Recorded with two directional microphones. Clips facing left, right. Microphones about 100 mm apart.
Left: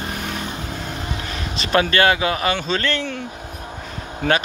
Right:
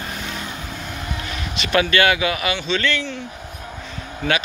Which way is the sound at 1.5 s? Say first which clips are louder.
Even; 35° left (ahead or behind).